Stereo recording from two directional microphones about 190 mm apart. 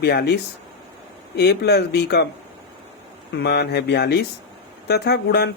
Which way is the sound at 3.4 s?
60° left (ahead or behind).